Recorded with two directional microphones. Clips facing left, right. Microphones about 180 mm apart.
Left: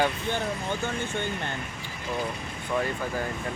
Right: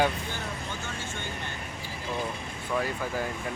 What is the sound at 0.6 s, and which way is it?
Speech, 55° left (ahead or behind).